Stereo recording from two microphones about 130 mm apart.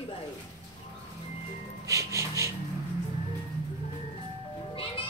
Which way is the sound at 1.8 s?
25° right (ahead or behind).